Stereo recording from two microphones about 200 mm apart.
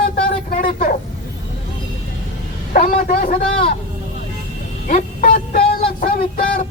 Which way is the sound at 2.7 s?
45° left (ahead or behind).